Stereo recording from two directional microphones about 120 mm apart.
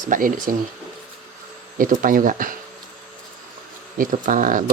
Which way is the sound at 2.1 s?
90° right.